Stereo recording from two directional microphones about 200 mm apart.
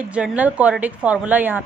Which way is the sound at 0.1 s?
5° right (ahead or behind).